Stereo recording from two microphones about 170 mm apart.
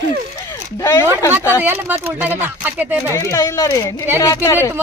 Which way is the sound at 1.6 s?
10° right (ahead or behind).